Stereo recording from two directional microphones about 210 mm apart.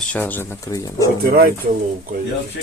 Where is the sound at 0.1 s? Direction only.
10° left (ahead or behind).